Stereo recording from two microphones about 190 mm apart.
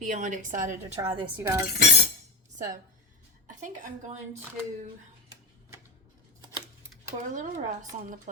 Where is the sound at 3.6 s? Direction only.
40° right (ahead or behind).